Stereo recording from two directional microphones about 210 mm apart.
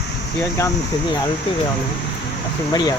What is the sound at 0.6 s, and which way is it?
Speech, 15° left (ahead or behind).